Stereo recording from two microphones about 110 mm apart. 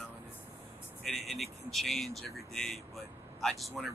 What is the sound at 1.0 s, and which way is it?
Speech, centre (ahead or behind).